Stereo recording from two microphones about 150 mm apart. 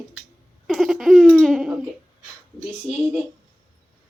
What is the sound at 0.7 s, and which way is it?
Laughter, centre (ahead or behind).